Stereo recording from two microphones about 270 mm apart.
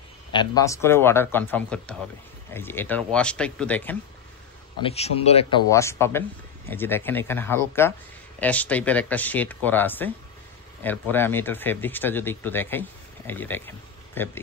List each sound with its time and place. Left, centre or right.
0.3 s speech: centre
4.8 s speech: left
5.7 s speech: centre